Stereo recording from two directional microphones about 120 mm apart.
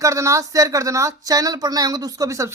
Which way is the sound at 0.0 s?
25° right (ahead or behind).